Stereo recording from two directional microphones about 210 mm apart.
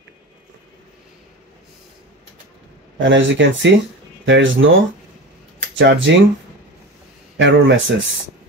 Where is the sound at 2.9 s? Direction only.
60° right (ahead or behind).